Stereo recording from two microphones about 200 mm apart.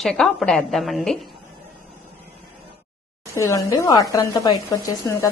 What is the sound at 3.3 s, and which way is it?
Speech, 15° left (ahead or behind).